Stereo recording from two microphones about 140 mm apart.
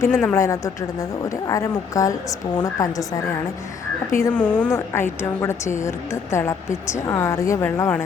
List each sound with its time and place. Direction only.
0.1 s speech: 5° left (ahead or behind)
0.3 s a woman's voice: 25° left (ahead or behind)